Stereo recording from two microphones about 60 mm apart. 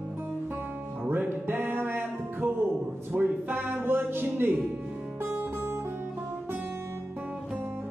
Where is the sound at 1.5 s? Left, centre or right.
Right.